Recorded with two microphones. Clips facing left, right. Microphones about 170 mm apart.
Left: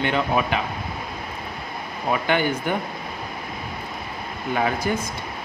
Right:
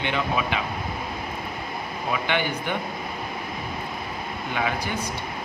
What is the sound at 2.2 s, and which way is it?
Speech, 45° left (ahead or behind).